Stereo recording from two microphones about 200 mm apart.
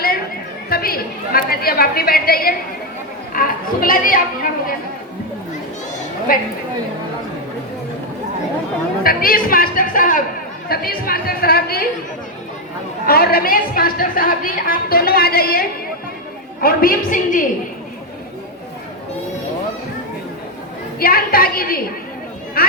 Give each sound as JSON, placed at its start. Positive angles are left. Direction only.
{"t": 0.7, "sound": "a woman's voice", "side_deg": 50}
{"t": 6.3, "sound": "a woman's voice", "side_deg": 45}
{"t": 9.0, "sound": "a woman's voice", "side_deg": 45}
{"t": 13.1, "sound": "a woman's voice", "side_deg": 50}
{"t": 21.0, "sound": "a woman's voice", "side_deg": 50}